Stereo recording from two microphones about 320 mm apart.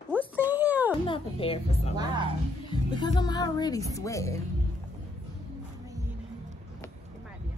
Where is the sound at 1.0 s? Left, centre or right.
Centre.